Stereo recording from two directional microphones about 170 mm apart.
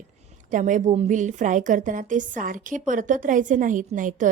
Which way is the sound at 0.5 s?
50° right (ahead or behind).